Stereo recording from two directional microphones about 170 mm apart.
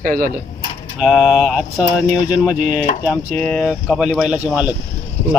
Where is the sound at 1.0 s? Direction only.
Centre (ahead or behind).